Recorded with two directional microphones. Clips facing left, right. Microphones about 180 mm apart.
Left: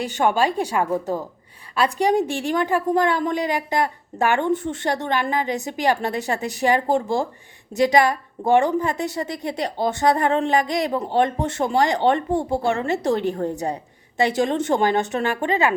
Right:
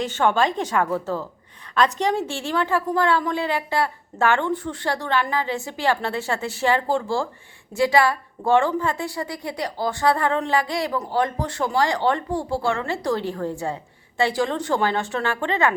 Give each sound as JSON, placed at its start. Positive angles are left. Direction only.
{"t": 0.0, "sound": "a woman's voice", "side_deg": 15}